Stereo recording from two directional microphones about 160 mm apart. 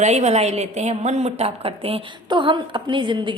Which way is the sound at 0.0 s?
45° right (ahead or behind).